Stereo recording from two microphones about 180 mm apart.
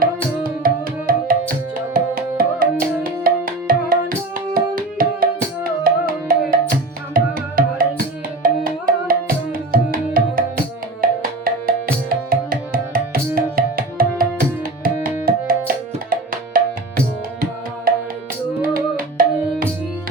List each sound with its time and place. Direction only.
0.0 s music: 50° right (ahead or behind)
15.4 s tabla: 55° right (ahead or behind)
18.6 s music: 50° right (ahead or behind)